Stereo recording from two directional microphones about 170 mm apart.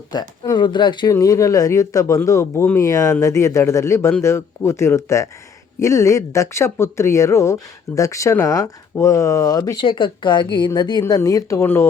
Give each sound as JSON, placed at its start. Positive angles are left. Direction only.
{"t": 0.1, "sound": "speech", "side_deg": 25}